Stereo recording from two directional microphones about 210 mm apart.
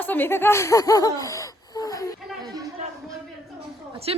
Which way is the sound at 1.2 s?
15° left (ahead or behind).